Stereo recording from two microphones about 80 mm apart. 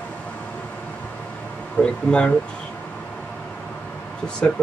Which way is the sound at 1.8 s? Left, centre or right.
Centre.